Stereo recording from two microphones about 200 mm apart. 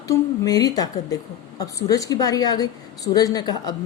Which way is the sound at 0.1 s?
20° left (ahead or behind).